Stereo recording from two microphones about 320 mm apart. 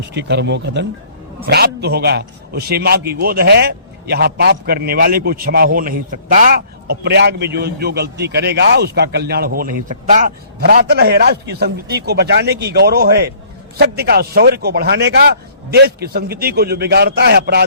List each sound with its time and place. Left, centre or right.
0.1 s a man's voice: right